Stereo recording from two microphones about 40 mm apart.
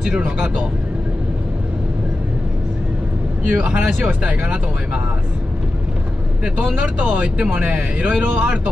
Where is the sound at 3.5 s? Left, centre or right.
Right.